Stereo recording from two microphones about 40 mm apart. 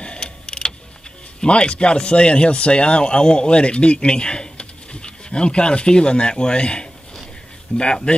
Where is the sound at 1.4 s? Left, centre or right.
Left.